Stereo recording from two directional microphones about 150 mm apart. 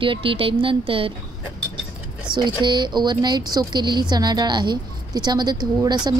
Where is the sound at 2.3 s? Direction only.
30° right (ahead or behind).